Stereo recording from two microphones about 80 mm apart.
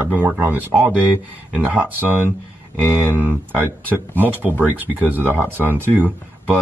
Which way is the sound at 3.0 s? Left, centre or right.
Right.